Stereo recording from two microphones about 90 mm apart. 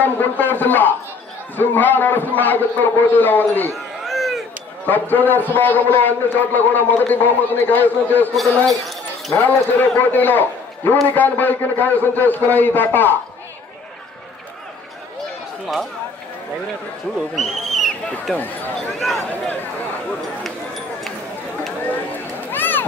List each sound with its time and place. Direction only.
0.0 s a man's voice: 20° left (ahead or behind)
3.7 s cat: centre (ahead or behind)
4.8 s a man's voice: 20° left (ahead or behind)
8.6 s a sound: centre (ahead or behind)
9.4 s a man's voice: 20° left (ahead or behind)
15.6 s speech: centre (ahead or behind)
17.4 s speech: centre (ahead or behind)
20.1 s a sound: 5° left (ahead or behind)
22.5 s a sound: 20° left (ahead or behind)